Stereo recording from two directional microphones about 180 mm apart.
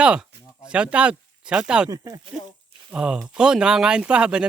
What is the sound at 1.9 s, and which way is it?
Speech, 20° right (ahead or behind).